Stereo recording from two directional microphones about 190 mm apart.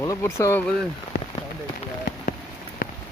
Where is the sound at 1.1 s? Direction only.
55° left (ahead or behind).